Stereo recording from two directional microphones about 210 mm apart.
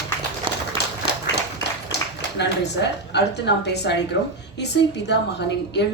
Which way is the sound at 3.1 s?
55° left (ahead or behind).